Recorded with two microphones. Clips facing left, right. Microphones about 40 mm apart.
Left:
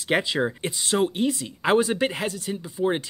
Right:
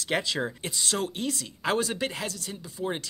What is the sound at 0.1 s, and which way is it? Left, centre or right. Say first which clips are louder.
Speech: left 5 dB; centre.